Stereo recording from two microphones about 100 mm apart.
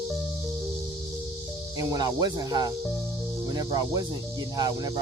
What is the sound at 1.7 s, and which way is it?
Speech, 40° right (ahead or behind).